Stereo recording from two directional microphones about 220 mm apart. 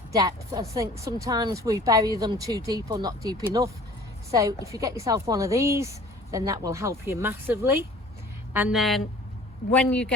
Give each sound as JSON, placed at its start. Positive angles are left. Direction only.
{"t": 0.1, "sound": "a woman's voice", "side_deg": -15}